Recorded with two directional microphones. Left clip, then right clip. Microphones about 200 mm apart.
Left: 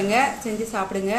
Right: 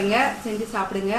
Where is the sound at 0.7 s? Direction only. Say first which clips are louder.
Even; 35° left (ahead or behind).